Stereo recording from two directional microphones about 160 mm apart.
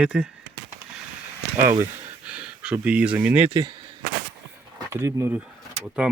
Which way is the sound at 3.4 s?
30° right (ahead or behind).